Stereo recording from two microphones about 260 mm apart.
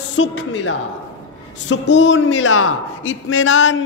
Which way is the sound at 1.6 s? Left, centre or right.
Left.